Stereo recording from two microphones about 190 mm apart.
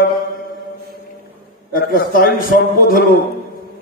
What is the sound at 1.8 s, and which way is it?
Speech, 50° left (ahead or behind).